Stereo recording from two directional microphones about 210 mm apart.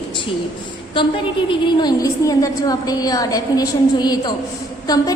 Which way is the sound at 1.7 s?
20° left (ahead or behind).